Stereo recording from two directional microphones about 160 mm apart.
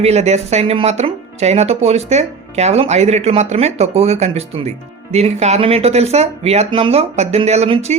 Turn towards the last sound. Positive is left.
turn(degrees=-40)  # may be behind; listen again after turning